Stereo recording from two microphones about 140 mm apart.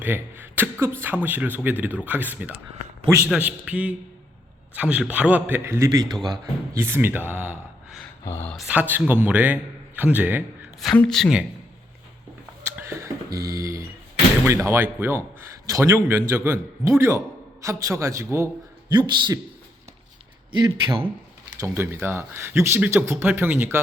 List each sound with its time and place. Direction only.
0.0 s a man's voice: 15° right (ahead or behind)
6.7 s speech: 15° right (ahead or behind)
8.2 s speech: 20° left (ahead or behind)
8.4 s speech: centre (ahead or behind)
8.7 s speech: 10° right (ahead or behind)
10.9 s speech: 5° left (ahead or behind)
12.6 s a sound: 20° right (ahead or behind)
14.4 s a man's voice: 20° right (ahead or behind)
18.9 s a man's voice: 30° right (ahead or behind)
20.5 s a man's voice: 35° right (ahead or behind)
21.6 s speech: 20° right (ahead or behind)